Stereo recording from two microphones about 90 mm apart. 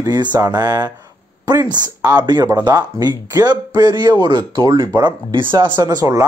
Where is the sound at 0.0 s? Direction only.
50° right (ahead or behind).